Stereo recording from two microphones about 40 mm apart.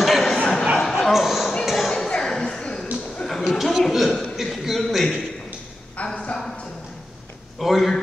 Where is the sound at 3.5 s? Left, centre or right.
Centre.